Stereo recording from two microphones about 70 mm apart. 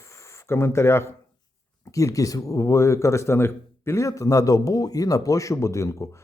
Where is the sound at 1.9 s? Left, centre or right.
Left.